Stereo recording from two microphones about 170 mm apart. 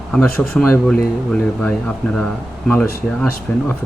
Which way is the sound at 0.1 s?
5° left (ahead or behind).